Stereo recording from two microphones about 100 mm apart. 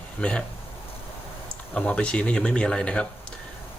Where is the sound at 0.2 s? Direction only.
10° left (ahead or behind).